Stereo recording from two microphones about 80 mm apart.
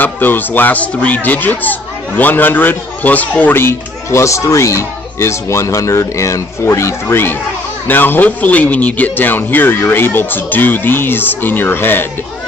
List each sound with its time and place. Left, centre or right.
0.0 s speech: left